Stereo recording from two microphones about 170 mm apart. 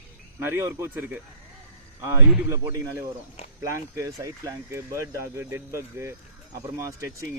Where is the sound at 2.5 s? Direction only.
15° right (ahead or behind).